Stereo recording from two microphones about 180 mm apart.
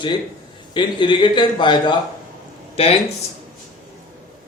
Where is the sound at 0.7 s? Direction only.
25° left (ahead or behind).